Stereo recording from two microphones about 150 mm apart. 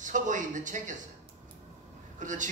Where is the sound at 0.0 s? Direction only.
55° right (ahead or behind).